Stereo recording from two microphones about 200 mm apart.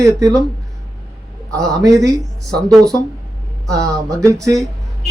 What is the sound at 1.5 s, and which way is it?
Speech, 15° right (ahead or behind).